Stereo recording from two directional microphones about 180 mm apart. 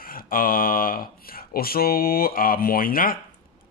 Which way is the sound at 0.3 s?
50° left (ahead or behind).